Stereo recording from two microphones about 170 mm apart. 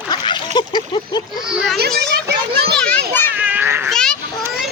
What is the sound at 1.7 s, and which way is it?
Speech, 70° right (ahead or behind).